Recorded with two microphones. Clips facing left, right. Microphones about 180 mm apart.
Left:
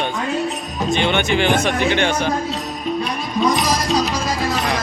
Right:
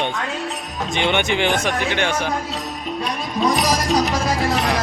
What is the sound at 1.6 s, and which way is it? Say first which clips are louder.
Speech: left 3 dB; centre (ahead or behind).